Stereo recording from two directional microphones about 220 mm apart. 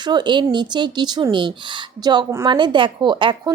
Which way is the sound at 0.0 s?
20° right (ahead or behind).